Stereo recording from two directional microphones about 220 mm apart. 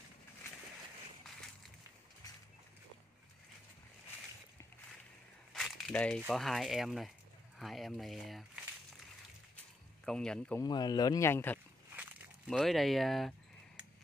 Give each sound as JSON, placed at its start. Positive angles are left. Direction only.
{"t": 5.5, "sound": "speech", "side_deg": 0}
{"t": 10.0, "sound": "speech", "side_deg": 5}
{"t": 10.6, "sound": "speech", "side_deg": 20}
{"t": 11.9, "sound": "a sound", "side_deg": -5}